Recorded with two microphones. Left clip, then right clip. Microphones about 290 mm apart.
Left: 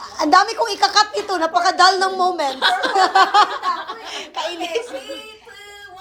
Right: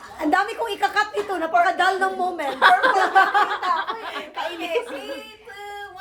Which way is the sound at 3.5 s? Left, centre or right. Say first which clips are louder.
Even; right.